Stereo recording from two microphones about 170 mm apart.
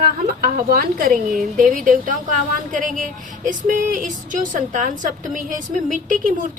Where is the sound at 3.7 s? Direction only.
50° right (ahead or behind).